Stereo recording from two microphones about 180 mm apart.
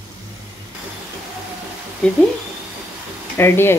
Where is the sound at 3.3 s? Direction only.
15° left (ahead or behind).